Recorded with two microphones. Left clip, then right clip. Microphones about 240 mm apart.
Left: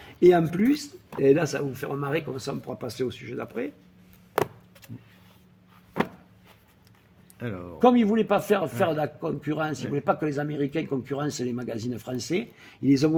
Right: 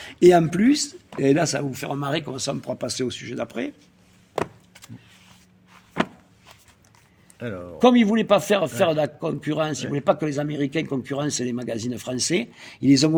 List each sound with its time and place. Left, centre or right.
0.0 s speech: right
7.3 s speech: centre
7.8 s speech: right